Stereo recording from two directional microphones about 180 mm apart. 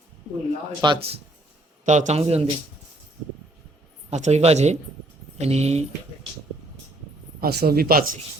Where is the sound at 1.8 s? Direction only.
40° right (ahead or behind).